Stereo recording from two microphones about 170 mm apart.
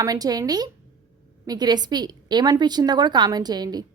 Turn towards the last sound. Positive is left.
turn(degrees=-25)  # may be behind; listen again after turning